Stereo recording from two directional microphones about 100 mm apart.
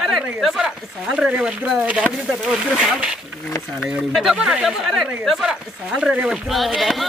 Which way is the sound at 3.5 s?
30° left (ahead or behind).